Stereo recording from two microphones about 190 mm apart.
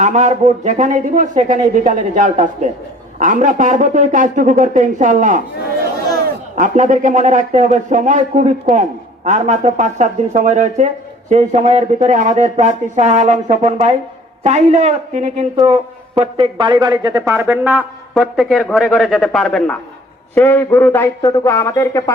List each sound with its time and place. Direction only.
0.0 s speech: 40° right (ahead or behind)
6.6 s a man's voice: 40° right (ahead or behind); by 22.1 s 15° left (ahead or behind)